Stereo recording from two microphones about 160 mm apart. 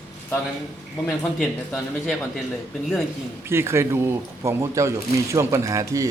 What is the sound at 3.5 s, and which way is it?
Speech, 15° right (ahead or behind).